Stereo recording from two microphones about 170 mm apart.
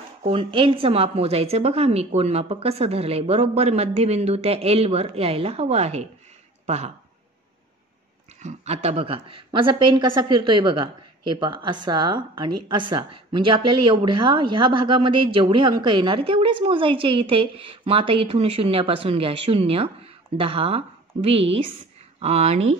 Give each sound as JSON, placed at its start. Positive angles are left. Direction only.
{"t": 0.2, "sound": "a woman's voice", "side_deg": -30}
{"t": 8.4, "sound": "a woman's voice", "side_deg": -40}